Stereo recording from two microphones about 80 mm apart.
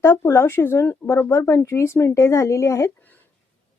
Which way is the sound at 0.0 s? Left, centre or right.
Left.